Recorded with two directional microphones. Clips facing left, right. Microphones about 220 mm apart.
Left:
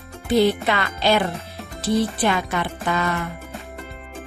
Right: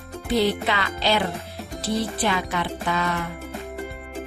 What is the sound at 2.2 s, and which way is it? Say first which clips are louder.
Speech: left 3 dB; 50° left (ahead or behind).